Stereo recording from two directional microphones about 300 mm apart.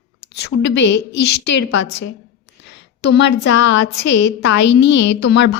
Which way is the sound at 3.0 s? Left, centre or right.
Left.